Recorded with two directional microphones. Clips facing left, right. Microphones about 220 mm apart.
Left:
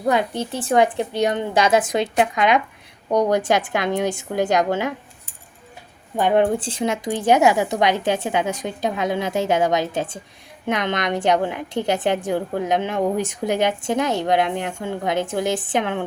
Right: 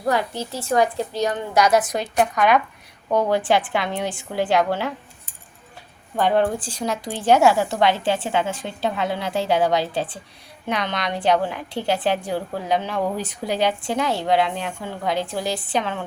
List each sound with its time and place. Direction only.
0.0 s a woman's voice: 20° left (ahead or behind)
6.1 s a woman's voice: 15° left (ahead or behind)